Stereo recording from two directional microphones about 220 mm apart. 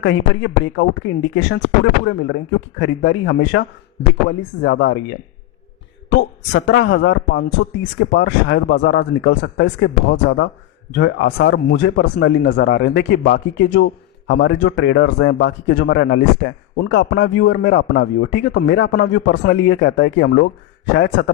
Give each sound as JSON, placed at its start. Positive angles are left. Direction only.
{"t": 0.0, "sound": "speech", "side_deg": 55}